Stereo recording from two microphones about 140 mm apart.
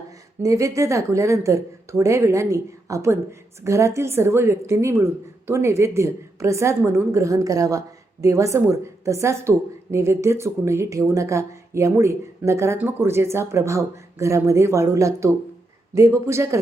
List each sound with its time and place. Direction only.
0.4 s a woman's voice: 25° right (ahead or behind)